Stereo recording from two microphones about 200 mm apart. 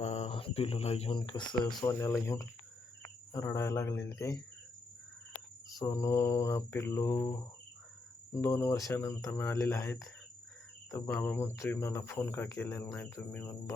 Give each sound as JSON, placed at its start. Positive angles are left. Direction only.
{"t": 0.0, "sound": "speech", "side_deg": 30}
{"t": 5.7, "sound": "speech", "side_deg": 15}